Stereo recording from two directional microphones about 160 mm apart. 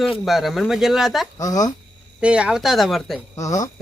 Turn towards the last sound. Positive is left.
turn(degrees=20)  # may be behind; listen again after turning